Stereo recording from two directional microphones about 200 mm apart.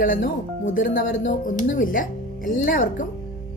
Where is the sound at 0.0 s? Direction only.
45° left (ahead or behind).